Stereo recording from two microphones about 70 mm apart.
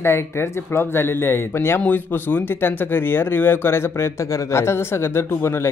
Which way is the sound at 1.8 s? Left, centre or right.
Left.